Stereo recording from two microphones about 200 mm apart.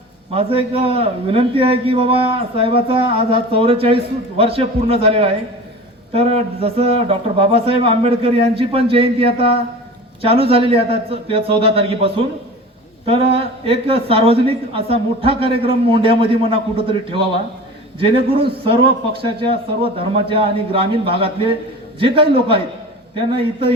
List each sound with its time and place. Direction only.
0.3 s a man's voice: 30° right (ahead or behind)